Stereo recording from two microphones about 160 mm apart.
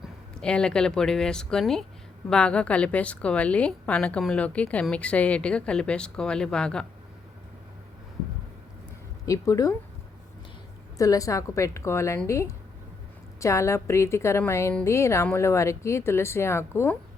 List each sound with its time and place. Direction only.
0.0 s a woman's voice: 5° left (ahead or behind)
9.2 s a woman's voice: 20° left (ahead or behind)
10.9 s a woman's voice: 20° left (ahead or behind)